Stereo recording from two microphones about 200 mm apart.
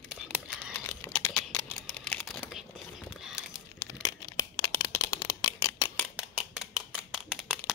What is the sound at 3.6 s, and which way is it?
Crumpling, 15° left (ahead or behind).